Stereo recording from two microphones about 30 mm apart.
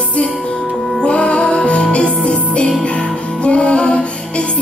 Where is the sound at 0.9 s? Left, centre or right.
Left.